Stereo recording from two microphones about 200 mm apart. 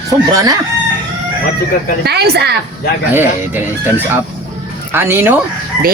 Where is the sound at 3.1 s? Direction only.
10° right (ahead or behind).